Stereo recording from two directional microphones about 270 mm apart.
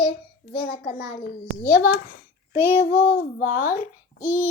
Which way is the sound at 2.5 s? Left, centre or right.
Centre.